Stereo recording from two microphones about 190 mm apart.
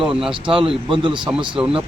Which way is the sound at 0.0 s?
5° right (ahead or behind).